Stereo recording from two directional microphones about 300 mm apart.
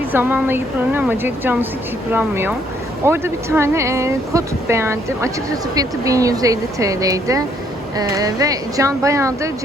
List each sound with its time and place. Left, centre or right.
0.1 s speech: centre